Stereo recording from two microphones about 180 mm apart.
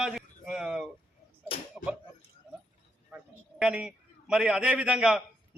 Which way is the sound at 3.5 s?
5° right (ahead or behind).